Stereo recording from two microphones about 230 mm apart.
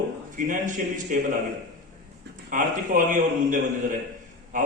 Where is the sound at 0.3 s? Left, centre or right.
Right.